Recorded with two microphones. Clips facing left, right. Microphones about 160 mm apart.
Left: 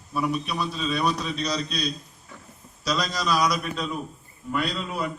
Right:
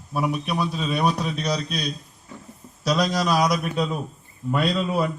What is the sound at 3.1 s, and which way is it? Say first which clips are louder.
Speech: right 3 dB; 55° right (ahead or behind).